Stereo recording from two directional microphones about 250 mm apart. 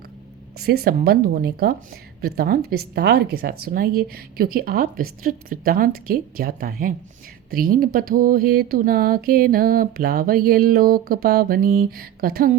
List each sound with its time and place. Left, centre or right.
0.6 s a woman's voice: right